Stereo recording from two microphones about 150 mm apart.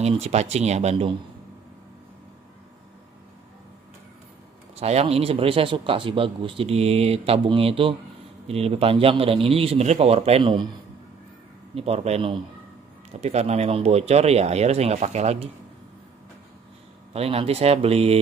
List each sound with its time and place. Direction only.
0.0 s speech: 45° right (ahead or behind)
4.7 s speech: 45° right (ahead or behind)
11.7 s speech: 40° right (ahead or behind)
17.1 s speech: 40° right (ahead or behind)